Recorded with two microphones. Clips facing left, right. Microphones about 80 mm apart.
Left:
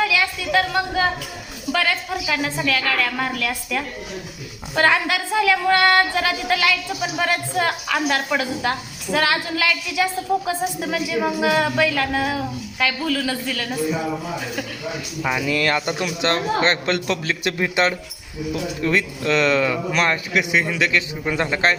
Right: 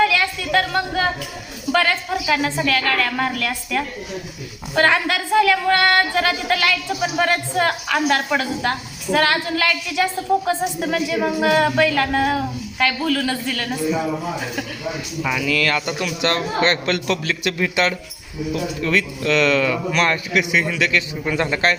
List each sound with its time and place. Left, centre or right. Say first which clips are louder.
0.0 s a woman's voice: right 3 dB; centre
15.2 s speech: even; left